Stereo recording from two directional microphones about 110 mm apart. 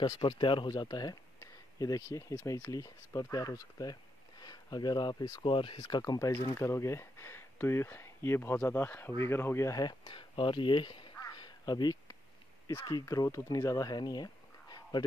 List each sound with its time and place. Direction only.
0.0 s speech: 40° left (ahead or behind)
5.4 s speech: 50° left (ahead or behind)